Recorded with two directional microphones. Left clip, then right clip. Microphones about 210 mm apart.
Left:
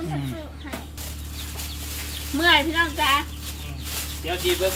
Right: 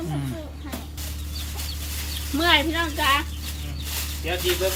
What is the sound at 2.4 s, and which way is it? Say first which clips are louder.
Speech: left 2 dB; 15° right (ahead or behind).